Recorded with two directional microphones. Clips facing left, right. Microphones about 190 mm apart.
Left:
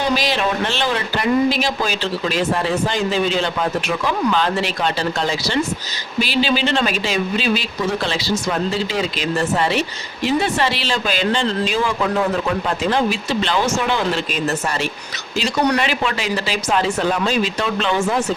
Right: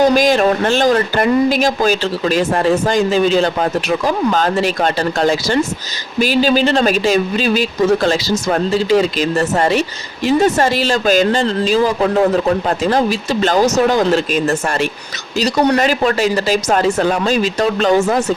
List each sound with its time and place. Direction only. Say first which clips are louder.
0.0 s a woman's voice: right 8 dB; 45° right (ahead or behind)
15.4 s speech: right 5 dB; 35° right (ahead or behind)